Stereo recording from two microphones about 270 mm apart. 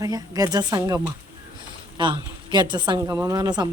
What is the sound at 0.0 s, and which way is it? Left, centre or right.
A woman's voice, centre.